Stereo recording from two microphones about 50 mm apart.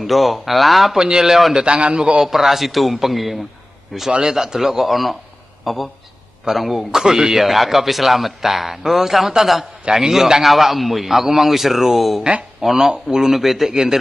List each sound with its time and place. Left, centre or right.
0.0 s a man's voice: centre
0.9 s a man's voice: centre
1.6 s a man's voice: right
2.2 s a man's voice: centre
4.1 s a man's voice: centre
12.2 s a man's voice: right
12.6 s a man's voice: centre